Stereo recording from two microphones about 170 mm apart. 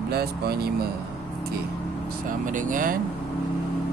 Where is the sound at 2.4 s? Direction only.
50° right (ahead or behind).